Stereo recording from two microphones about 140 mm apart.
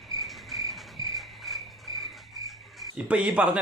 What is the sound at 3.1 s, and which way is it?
Speech, 10° right (ahead or behind).